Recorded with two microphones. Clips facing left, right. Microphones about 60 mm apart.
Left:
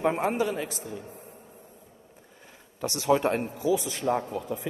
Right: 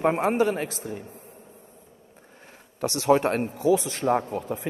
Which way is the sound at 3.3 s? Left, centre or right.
Right.